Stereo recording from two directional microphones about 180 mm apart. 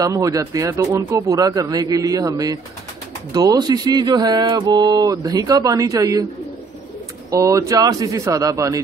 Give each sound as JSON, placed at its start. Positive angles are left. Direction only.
{"t": 0.0, "sound": "speech", "side_deg": -20}
{"t": 7.2, "sound": "a man's voice", "side_deg": -20}